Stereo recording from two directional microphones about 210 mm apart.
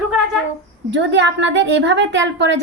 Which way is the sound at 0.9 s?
60° right (ahead or behind).